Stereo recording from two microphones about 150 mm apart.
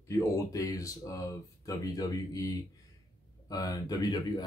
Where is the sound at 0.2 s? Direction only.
20° left (ahead or behind).